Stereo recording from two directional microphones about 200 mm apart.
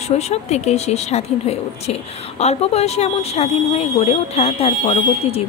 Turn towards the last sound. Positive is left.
turn(degrees=30)  # may be behind; listen again after turning